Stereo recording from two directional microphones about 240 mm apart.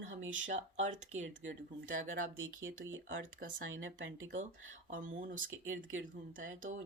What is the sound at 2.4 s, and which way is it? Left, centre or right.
Speech, right.